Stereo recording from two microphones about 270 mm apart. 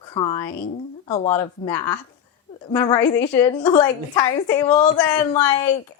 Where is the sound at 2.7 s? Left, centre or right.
Centre.